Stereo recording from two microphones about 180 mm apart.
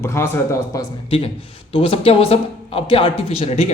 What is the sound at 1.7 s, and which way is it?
Speech, 30° left (ahead or behind).